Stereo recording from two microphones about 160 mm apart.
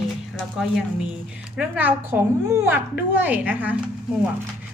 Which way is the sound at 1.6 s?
10° right (ahead or behind).